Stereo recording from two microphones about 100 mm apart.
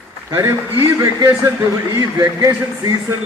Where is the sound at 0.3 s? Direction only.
30° right (ahead or behind).